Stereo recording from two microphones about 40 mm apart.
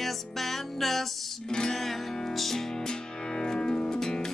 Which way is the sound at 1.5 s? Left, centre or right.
Centre.